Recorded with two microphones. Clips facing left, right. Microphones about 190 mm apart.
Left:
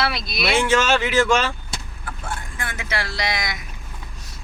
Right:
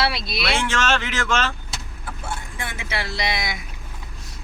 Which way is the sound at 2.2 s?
25° right (ahead or behind).